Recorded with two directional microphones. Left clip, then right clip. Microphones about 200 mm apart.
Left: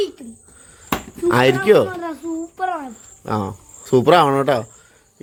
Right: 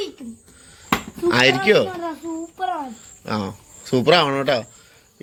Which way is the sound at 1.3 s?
35° left (ahead or behind).